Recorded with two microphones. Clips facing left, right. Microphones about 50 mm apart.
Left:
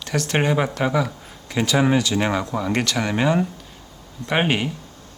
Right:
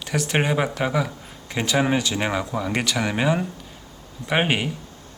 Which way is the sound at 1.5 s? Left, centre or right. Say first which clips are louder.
Left 2 dB; right.